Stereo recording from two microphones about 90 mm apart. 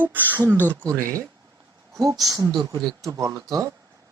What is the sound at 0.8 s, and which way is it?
Speech, 35° right (ahead or behind).